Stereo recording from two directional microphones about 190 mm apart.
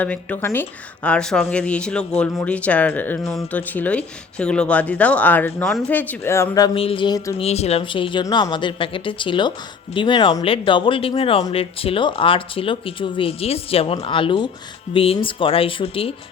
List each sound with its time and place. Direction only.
0.0 s a woman's voice: 10° left (ahead or behind); by 7.4 s 25° left (ahead or behind)
7.4 s speech: 35° left (ahead or behind)